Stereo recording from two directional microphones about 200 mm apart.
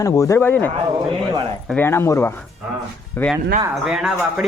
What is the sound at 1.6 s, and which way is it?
Speech, 10° left (ahead or behind).